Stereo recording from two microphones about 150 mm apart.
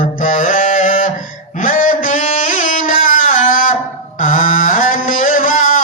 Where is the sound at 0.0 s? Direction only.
60° left (ahead or behind).